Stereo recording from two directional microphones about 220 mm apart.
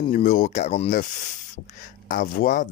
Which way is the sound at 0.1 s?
35° left (ahead or behind).